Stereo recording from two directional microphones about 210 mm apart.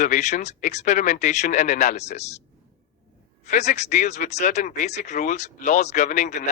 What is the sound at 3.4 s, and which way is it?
Speech, 35° left (ahead or behind).